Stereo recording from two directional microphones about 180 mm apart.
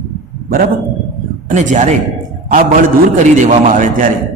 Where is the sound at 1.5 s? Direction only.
45° right (ahead or behind).